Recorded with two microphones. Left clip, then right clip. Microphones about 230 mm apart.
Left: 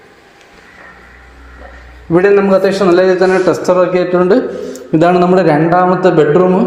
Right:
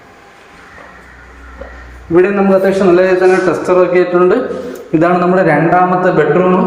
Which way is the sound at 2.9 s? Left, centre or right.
Left.